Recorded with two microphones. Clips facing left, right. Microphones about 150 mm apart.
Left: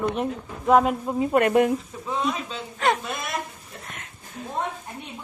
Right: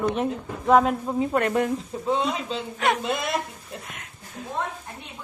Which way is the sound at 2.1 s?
30° right (ahead or behind).